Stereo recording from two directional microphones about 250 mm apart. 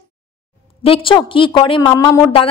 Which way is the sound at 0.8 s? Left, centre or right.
Left.